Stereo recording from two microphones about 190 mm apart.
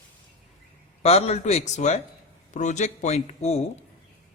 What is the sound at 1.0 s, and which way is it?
Speech, 35° left (ahead or behind).